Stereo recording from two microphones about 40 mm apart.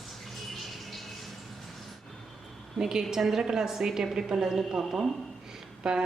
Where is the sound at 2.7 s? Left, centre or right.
Centre.